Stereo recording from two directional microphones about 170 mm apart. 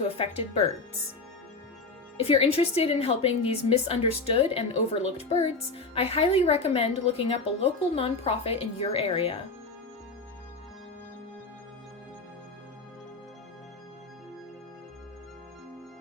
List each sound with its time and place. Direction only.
0.2 s speech: 40° left (ahead or behind)
2.1 s speech: 35° left (ahead or behind)